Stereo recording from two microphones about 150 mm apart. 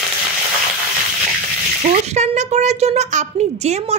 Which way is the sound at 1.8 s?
45° right (ahead or behind).